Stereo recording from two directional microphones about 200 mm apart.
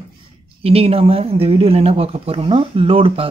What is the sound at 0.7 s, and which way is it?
Speech, 30° right (ahead or behind).